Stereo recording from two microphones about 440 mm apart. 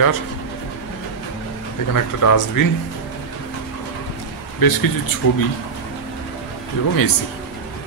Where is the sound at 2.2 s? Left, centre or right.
Left.